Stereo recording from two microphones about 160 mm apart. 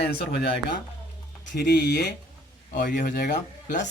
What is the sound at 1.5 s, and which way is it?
Speech, 85° left.